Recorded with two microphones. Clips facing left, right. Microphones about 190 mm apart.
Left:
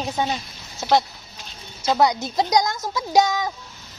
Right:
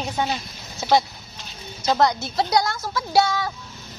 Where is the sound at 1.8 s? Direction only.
10° left (ahead or behind).